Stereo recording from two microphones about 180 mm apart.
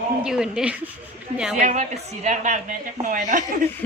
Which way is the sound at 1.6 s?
40° right (ahead or behind).